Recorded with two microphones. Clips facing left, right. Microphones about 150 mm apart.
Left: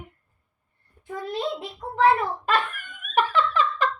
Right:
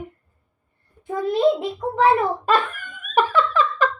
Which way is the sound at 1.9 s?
55° right (ahead or behind).